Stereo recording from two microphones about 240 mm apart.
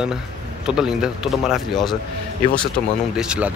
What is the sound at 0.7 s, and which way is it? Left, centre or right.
Speech, centre.